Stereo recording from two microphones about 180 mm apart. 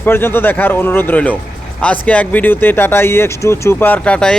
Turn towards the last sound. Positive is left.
turn(degrees=5)  # may be behind; listen again after turning